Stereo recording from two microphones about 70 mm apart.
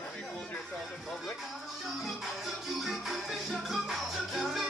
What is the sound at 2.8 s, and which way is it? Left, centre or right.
Music, centre.